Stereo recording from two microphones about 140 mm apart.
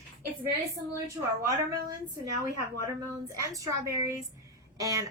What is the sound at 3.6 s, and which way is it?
A woman's voice, 25° right (ahead or behind).